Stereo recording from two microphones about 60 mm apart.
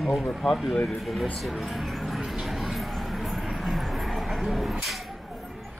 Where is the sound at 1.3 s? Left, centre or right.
Centre.